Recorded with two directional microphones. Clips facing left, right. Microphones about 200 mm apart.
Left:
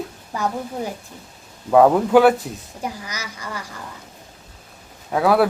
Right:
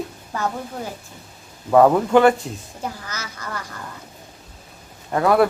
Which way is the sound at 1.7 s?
5° left (ahead or behind).